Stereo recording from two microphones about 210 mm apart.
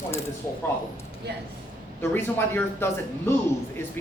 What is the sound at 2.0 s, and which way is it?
Speech, 10° left (ahead or behind).